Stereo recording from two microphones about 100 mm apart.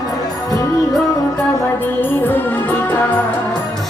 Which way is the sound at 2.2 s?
20° left (ahead or behind).